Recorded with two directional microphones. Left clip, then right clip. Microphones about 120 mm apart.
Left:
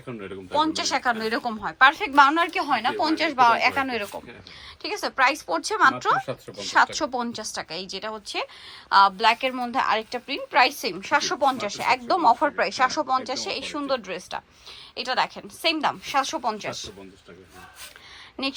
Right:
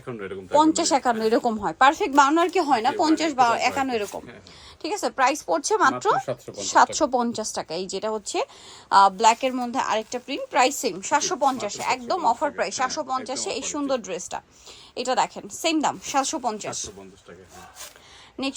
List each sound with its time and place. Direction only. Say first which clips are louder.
0.0 s speech: right 3 dB; 5° right (ahead or behind)
0.6 s a woman's voice: right 2 dB; 45° right (ahead or behind)
2.6 s a woman's voice: right 3 dB; 50° right (ahead or behind); by 16.9 s 30° right (ahead or behind)